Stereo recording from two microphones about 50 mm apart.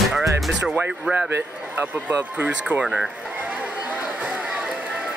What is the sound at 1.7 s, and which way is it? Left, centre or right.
Speech, right.